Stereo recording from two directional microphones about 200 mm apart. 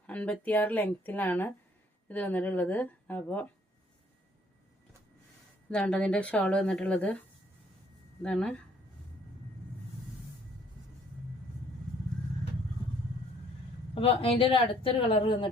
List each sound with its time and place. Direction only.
0.1 s a woman's voice: 5° left (ahead or behind)
5.7 s speech: 5° left (ahead or behind)
8.2 s speech: 5° left (ahead or behind)
13.9 s a woman's voice: 30° left (ahead or behind)